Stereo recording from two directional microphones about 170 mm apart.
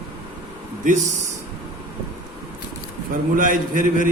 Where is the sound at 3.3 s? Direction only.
50° right (ahead or behind).